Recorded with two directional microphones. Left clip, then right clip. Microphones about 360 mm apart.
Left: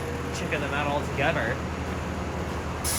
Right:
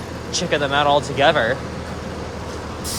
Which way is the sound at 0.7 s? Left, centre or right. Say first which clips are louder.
Right 11 dB; centre.